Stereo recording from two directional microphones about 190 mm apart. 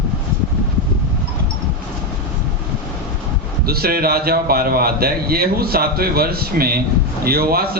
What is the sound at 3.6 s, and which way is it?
Speech, 55° right (ahead or behind).